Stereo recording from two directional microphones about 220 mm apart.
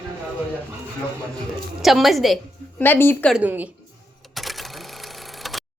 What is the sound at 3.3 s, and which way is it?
Speech, 5° right (ahead or behind).